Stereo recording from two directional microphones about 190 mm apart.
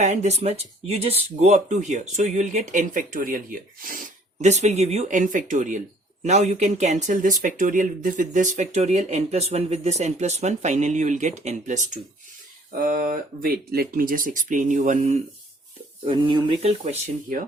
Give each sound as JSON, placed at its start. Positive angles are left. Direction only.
{"t": 0.0, "sound": "speech", "side_deg": -35}
{"t": 16.0, "sound": "speech", "side_deg": -25}